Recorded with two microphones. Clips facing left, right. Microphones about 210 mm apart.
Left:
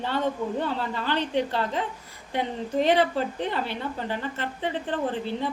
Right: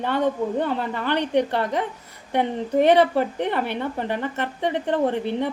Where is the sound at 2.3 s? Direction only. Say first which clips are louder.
Right 5 dB; 60° right (ahead or behind).